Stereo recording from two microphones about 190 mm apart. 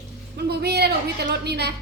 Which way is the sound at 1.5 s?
60° right (ahead or behind).